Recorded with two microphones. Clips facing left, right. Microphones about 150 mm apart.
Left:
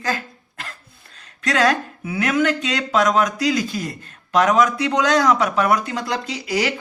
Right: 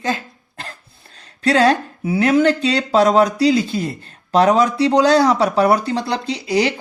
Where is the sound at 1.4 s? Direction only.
30° right (ahead or behind).